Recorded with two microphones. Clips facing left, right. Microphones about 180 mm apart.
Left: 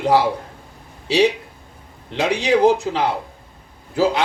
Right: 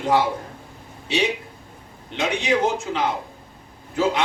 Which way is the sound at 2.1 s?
35° left (ahead or behind).